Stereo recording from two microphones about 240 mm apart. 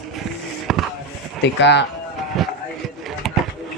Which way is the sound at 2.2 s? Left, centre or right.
Centre.